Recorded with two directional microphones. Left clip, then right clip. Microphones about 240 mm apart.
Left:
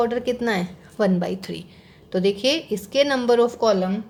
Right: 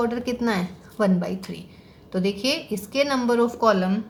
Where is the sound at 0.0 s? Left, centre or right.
Left.